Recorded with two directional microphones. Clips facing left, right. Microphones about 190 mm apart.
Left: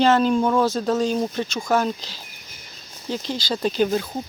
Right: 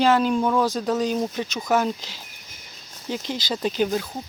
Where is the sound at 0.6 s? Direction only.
15° right (ahead or behind).